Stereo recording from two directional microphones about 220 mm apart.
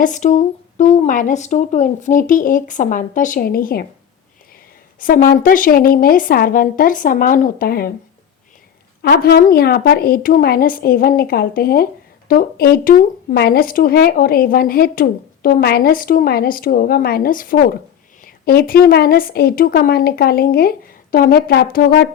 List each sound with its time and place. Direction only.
0.0 s speech: 35° left (ahead or behind)
4.9 s speech: 40° left (ahead or behind)
9.0 s a woman's voice: 45° left (ahead or behind)